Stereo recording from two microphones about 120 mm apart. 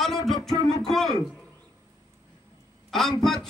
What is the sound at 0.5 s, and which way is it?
Speech, 35° left (ahead or behind).